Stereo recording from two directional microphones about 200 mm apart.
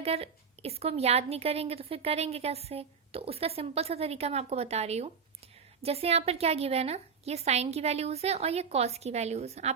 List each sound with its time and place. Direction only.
0.0 s a woman's voice: 30° right (ahead or behind)